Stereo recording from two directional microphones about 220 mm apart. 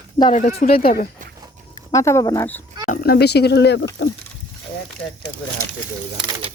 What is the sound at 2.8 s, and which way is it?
Speech, 40° left (ahead or behind).